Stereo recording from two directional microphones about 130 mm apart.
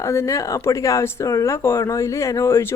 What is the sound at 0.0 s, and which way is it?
Speech, 20° left (ahead or behind).